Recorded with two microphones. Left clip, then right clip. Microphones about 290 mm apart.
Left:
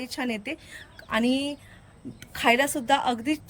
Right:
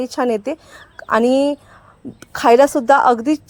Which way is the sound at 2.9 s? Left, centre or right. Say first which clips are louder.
Right 12 dB; centre.